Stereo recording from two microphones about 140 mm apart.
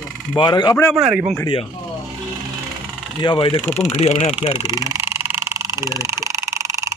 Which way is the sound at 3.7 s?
50° left (ahead or behind).